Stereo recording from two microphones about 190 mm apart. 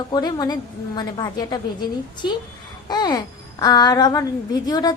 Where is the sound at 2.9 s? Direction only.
20° left (ahead or behind).